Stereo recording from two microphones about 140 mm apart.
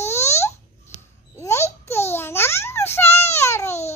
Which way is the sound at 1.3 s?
20° left (ahead or behind).